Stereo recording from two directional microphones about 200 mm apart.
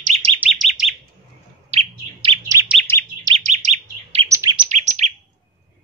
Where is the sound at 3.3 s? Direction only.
35° right (ahead or behind).